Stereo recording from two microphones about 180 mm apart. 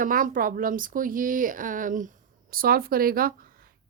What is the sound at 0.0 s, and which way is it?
Speech, 50° right (ahead or behind).